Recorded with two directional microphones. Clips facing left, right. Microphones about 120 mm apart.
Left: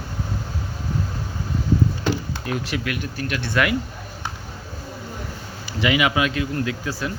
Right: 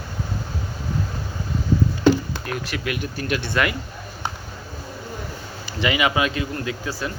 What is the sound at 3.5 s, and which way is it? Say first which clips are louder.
Speech: left 2 dB; 5° left (ahead or behind).